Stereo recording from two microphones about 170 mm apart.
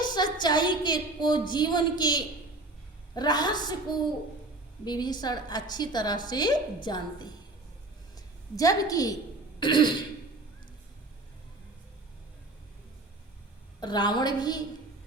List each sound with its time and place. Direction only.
0.0 s a woman's voice: 25° left (ahead or behind)
4.9 s a woman's voice: 25° left (ahead or behind)
9.6 s throat clearing: 25° left (ahead or behind)
13.7 s a woman's voice: 25° left (ahead or behind)